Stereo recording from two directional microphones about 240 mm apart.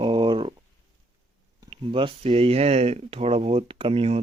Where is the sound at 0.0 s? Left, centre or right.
Centre.